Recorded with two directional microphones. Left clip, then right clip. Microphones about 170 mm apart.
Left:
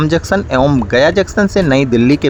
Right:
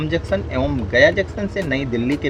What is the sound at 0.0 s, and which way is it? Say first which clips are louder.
Speech: left 7 dB; 35° left (ahead or behind).